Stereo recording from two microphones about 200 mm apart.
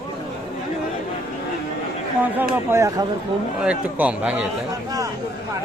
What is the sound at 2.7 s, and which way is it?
A man's voice, 15° right (ahead or behind).